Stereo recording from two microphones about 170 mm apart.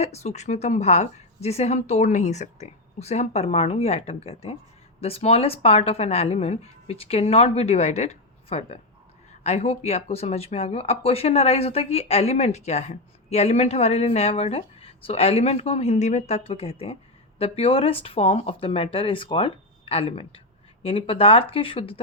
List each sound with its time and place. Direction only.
0.0 s speech: 40° left (ahead or behind)